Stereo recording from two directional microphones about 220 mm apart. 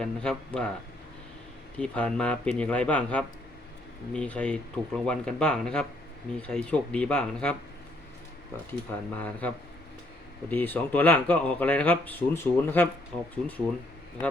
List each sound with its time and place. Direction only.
0.0 s speech: 5° left (ahead or behind)
1.8 s speech: 5° left (ahead or behind)
8.9 s speech: 5° left (ahead or behind)
10.5 s speech: 10° left (ahead or behind)